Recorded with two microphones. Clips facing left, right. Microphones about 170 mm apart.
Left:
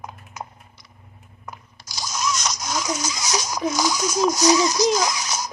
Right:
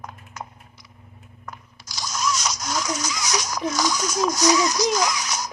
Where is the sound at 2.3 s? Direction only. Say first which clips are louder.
Even; 5° right (ahead or behind).